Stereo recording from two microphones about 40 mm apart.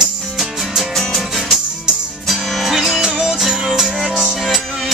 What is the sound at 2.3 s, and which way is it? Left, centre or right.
Music, centre.